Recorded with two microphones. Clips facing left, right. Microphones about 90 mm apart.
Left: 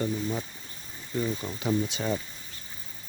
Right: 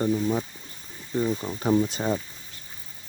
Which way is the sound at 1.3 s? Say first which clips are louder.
Right 4 dB; 20° right (ahead or behind).